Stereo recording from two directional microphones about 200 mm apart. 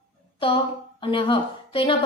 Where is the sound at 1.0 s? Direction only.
25° left (ahead or behind).